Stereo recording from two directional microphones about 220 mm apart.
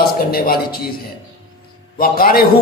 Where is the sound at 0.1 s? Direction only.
45° left (ahead or behind).